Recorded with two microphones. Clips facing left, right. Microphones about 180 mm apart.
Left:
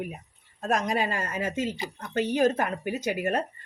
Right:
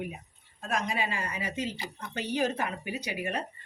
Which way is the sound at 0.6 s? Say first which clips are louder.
Left 5 dB; 45° left (ahead or behind).